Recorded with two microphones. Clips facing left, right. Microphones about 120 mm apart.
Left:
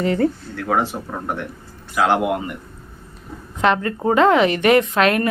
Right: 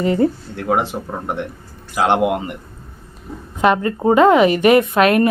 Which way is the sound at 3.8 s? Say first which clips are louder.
Right 3 dB; 20° right (ahead or behind).